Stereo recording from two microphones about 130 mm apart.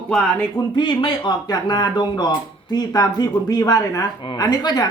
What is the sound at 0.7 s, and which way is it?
Speech, 35° left (ahead or behind).